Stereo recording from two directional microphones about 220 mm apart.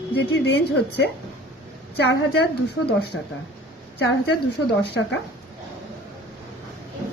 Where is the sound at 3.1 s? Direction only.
60° left (ahead or behind).